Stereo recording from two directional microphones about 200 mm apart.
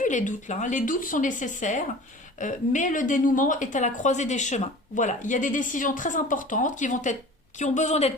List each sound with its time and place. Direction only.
0.0 s speech: 40° left (ahead or behind)